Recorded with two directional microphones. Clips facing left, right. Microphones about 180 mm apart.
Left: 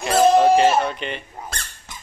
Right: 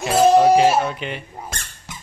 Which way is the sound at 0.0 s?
5° right (ahead or behind).